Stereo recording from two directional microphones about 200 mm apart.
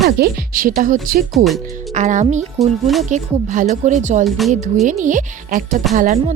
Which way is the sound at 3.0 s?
35° right (ahead or behind).